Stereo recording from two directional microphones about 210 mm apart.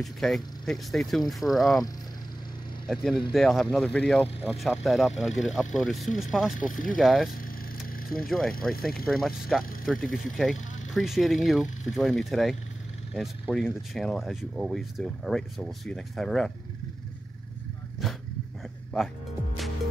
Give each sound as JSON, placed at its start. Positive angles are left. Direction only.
{"t": 0.0, "sound": "speech", "side_deg": 0}
{"t": 2.9, "sound": "speech", "side_deg": 0}
{"t": 6.7, "sound": "speech", "side_deg": 40}
{"t": 7.0, "sound": "speech", "side_deg": 0}
{"t": 8.5, "sound": "speech", "side_deg": 45}
{"t": 9.1, "sound": "speech", "side_deg": 0}
{"t": 18.0, "sound": "dog", "side_deg": 0}